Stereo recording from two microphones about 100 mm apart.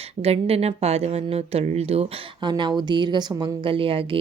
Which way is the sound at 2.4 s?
50° right (ahead or behind).